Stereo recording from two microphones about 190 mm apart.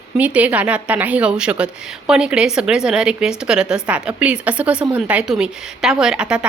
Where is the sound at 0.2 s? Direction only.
5° right (ahead or behind).